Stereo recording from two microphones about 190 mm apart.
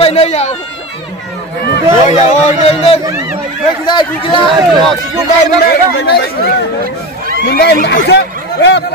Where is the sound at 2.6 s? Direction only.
30° left (ahead or behind).